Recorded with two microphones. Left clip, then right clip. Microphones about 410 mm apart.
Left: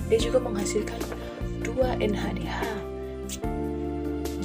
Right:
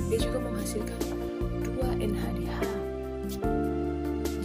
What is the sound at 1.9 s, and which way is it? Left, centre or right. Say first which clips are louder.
Speech: left 4 dB; right.